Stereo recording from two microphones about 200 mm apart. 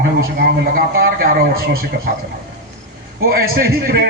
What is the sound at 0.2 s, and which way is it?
Speech, 45° right (ahead or behind).